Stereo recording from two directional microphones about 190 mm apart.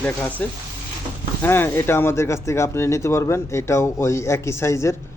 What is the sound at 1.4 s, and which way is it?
Speech, 10° left (ahead or behind).